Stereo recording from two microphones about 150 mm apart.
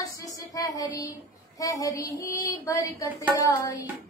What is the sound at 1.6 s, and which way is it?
Speech, 25° left (ahead or behind).